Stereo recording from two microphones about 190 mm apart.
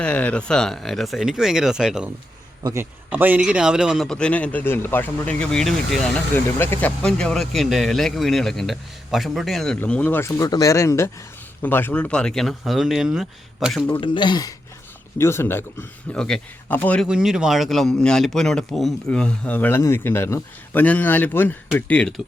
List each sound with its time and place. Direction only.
0.0 s a man's voice: 5° left (ahead or behind)
13.9 s a man's voice: 25° left (ahead or behind); by 17.1 s 10° left (ahead or behind)
17.1 s a man's voice: 5° right (ahead or behind)